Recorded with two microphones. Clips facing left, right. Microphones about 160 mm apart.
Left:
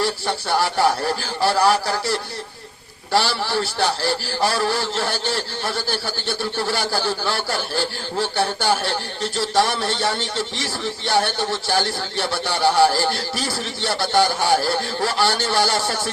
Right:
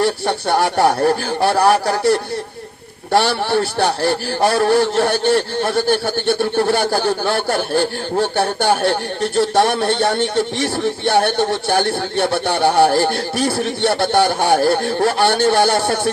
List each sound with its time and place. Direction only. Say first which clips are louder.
0.0 s a man's voice: right 6 dB; 60° right (ahead or behind)